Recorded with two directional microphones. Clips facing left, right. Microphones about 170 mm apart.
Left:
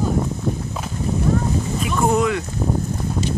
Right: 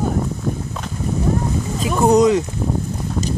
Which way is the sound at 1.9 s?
20° right (ahead or behind).